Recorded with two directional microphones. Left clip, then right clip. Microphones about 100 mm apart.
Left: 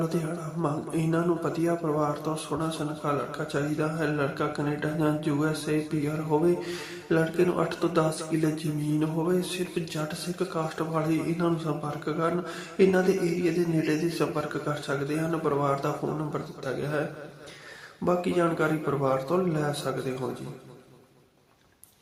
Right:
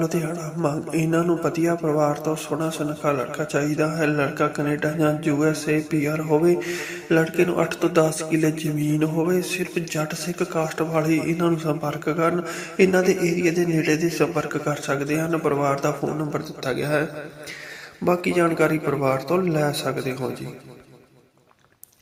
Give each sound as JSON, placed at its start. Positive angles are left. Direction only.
{"t": 0.0, "sound": "a man's voice", "side_deg": -25}
{"t": 16.6, "sound": "a man's voice", "side_deg": -50}
{"t": 18.0, "sound": "a man's voice", "side_deg": -30}